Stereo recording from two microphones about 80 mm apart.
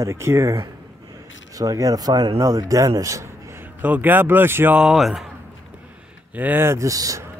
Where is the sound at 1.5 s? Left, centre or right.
Right.